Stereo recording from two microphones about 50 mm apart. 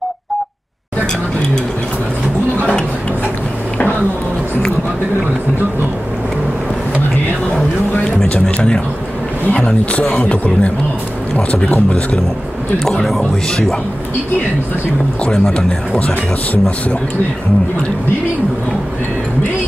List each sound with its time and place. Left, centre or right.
8.0 s a man's voice: left
12.8 s speech: centre
15.2 s a man's voice: left